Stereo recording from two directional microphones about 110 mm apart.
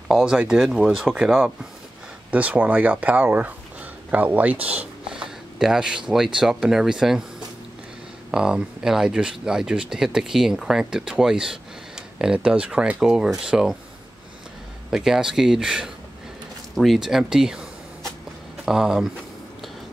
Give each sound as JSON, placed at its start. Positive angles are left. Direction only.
{"t": 0.1, "sound": "speech", "side_deg": -5}
{"t": 14.9, "sound": "speech", "side_deg": -5}
{"t": 18.7, "sound": "speech", "side_deg": -5}